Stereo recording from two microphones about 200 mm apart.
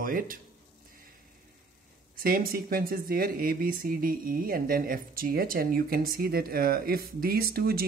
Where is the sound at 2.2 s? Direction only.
45° right (ahead or behind).